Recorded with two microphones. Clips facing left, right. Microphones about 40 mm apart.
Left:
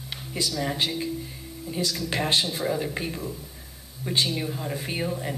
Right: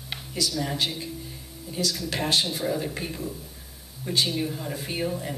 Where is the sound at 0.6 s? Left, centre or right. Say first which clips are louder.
Left 4 dB; centre.